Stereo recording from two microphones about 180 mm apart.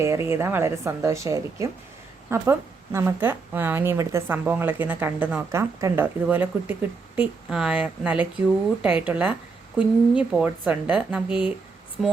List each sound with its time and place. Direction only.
0.0 s a woman's voice: 15° right (ahead or behind)